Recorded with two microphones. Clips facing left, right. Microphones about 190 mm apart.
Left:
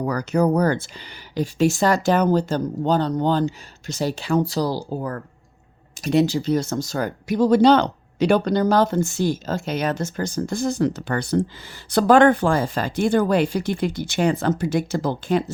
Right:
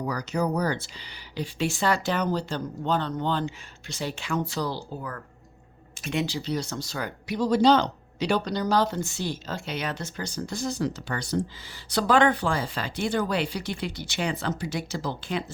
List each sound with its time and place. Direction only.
0.0 s speech: 55° left (ahead or behind)